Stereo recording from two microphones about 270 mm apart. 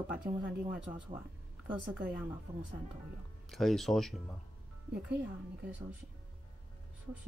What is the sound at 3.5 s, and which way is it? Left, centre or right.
Speech, centre.